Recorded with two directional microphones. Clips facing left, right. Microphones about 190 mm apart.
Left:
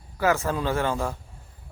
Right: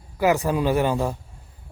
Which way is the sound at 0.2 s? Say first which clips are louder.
Right 3 dB; 15° right (ahead or behind).